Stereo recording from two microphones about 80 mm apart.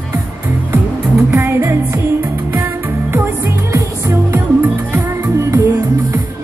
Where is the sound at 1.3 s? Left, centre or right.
Right.